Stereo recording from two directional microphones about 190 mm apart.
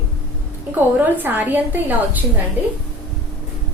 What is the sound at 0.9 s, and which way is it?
A woman's voice, 10° right (ahead or behind).